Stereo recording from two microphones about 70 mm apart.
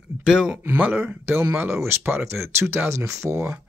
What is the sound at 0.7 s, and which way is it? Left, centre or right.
Speech, right.